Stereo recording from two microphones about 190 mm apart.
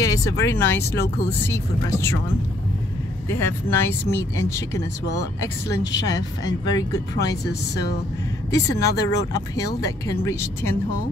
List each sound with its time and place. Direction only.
0.0 s speech: 15° left (ahead or behind)
1.0 s speech: 55° left (ahead or behind)
1.5 s speech: 15° left (ahead or behind)
3.3 s speech: 15° left (ahead or behind)
6.0 s speech: 20° left (ahead or behind)
8.5 s speech: 20° left (ahead or behind)